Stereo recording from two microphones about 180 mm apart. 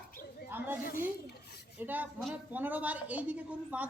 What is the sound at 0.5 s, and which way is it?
Speech, 10° right (ahead or behind).